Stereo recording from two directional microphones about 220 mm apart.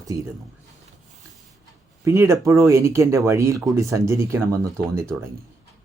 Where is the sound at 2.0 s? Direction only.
15° right (ahead or behind).